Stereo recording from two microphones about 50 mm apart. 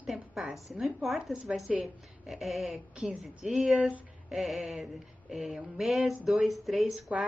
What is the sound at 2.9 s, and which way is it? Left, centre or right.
Speech, right.